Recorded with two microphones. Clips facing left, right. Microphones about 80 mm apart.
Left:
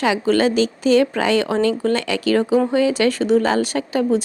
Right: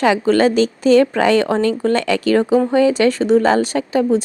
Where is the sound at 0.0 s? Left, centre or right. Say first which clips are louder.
Right 3 dB; right.